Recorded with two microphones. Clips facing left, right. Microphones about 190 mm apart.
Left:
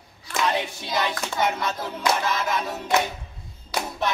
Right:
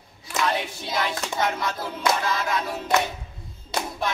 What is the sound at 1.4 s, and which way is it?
Speech, 20° left (ahead or behind).